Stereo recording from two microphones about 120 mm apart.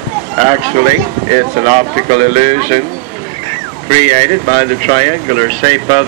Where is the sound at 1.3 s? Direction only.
75° right (ahead or behind).